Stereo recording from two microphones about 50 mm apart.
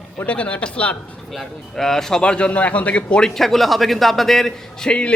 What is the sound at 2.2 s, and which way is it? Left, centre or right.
Speech, centre.